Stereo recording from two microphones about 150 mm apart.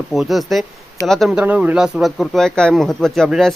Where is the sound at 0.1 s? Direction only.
Centre (ahead or behind).